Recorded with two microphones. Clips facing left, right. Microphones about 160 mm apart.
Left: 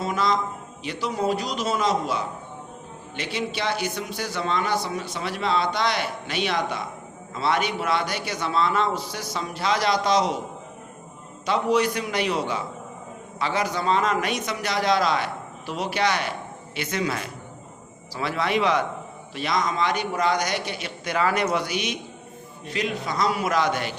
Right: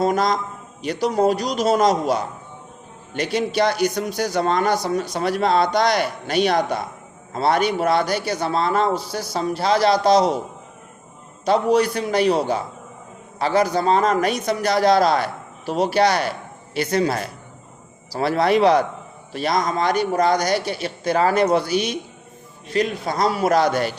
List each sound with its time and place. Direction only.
0.0 s a man's voice: 40° right (ahead or behind)
11.4 s a man's voice: 35° right (ahead or behind)